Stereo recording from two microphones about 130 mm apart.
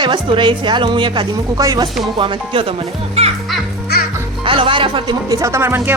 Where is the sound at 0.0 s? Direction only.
40° right (ahead or behind).